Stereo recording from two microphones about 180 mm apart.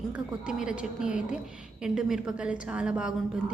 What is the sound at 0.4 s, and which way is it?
A woman's voice, 5° right (ahead or behind).